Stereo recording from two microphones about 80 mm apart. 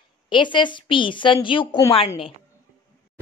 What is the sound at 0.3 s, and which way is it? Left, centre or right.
A woman's voice, left.